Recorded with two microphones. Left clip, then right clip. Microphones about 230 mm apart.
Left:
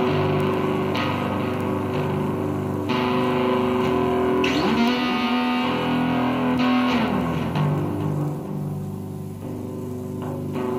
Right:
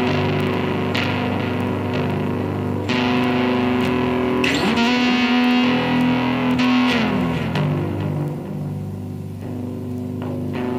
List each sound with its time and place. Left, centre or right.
0.0 s music: right